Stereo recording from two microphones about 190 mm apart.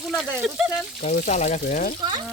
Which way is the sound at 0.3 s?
5° right (ahead or behind).